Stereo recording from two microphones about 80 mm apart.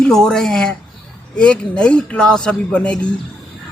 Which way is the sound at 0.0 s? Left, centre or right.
Centre.